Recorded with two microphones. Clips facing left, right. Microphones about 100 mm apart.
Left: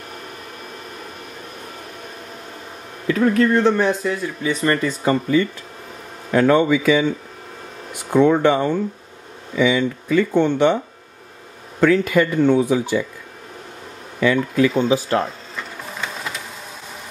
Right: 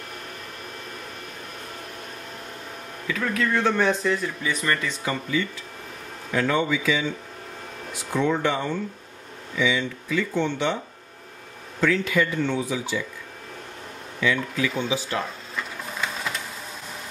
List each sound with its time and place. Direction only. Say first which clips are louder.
3.5 s speech: left 5 dB; 15° left (ahead or behind)
4.4 s speech: left 6 dB; 25° left (ahead or behind)
4.8 s speech: left 9 dB; 45° left (ahead or behind)
11.8 s speech: left 7 dB; 50° left (ahead or behind)
14.2 s speech: left 8 dB; 50° left (ahead or behind)
15.8 s printer: left 1 dB; centre (ahead or behind)